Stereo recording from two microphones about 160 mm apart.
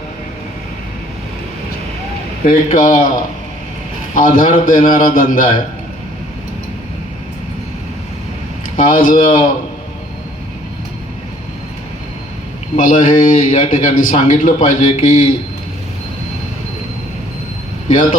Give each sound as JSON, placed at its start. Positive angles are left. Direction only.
{"t": 2.4, "sound": "a man's voice", "side_deg": 55}
{"t": 4.1, "sound": "a man's voice", "side_deg": 60}
{"t": 8.7, "sound": "a man's voice", "side_deg": 60}
{"t": 12.8, "sound": "a man's voice", "side_deg": 55}